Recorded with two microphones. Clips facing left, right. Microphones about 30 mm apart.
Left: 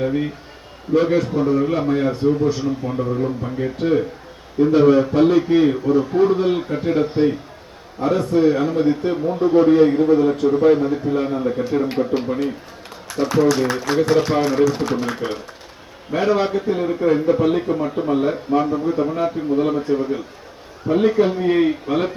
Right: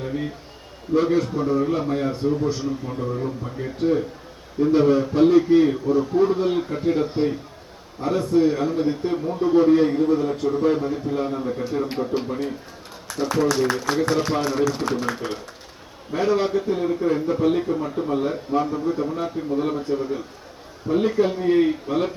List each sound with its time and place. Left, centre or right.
0.0 s a man's voice: left
9.3 s a man's voice: centre